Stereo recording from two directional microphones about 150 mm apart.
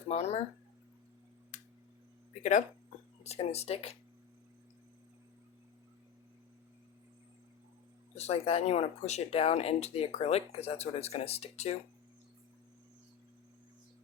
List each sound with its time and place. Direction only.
0.1 s speech: 45° left (ahead or behind)
2.4 s speech: 55° left (ahead or behind)
3.2 s speech: 45° left (ahead or behind)
8.1 s speech: 45° left (ahead or behind)